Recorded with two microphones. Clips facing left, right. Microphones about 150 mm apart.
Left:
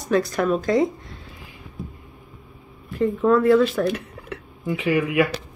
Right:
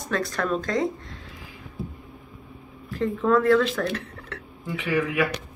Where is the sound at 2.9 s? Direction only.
10° left (ahead or behind).